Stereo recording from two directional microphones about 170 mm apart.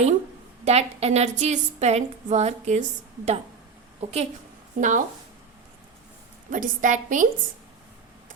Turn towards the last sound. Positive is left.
turn(degrees=-50)  # may be behind; listen again after turning